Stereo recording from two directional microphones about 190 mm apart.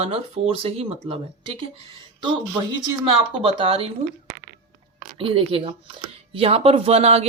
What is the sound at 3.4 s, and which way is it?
Speech, 30° right (ahead or behind).